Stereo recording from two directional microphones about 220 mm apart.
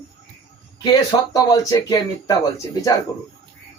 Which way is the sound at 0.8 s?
15° left (ahead or behind).